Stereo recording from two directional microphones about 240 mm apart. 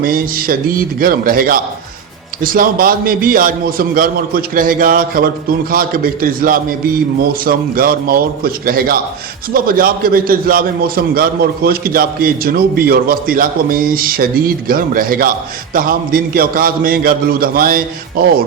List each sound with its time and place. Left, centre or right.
0.0 s a man's voice: right